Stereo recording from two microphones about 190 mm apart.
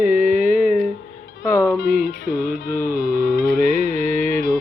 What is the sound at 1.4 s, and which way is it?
Music, 15° left (ahead or behind).